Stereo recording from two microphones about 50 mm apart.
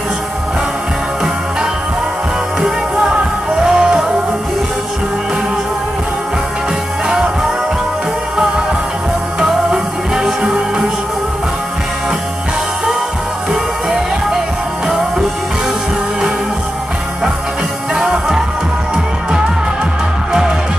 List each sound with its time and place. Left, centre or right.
2.6 s music: centre
9.4 s music: centre
13.5 s music: centre
17.9 s music: centre